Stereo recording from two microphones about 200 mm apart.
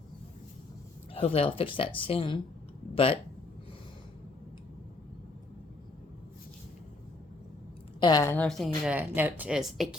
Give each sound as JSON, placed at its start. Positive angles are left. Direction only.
{"t": 1.1, "sound": "speech", "side_deg": 30}
{"t": 7.9, "sound": "speech", "side_deg": 20}